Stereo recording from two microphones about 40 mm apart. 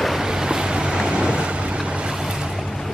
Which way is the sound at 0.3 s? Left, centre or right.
Centre.